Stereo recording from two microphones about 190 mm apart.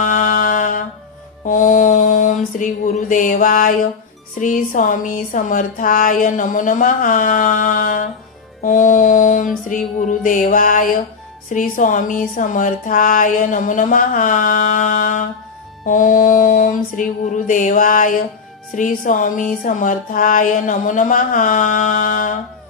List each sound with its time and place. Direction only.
0.0 s a sound: 45° left (ahead or behind)
1.4 s mantra: 45° left (ahead or behind)
4.4 s speech: 45° left (ahead or behind)